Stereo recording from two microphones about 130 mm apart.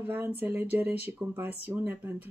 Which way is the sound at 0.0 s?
15° right (ahead or behind).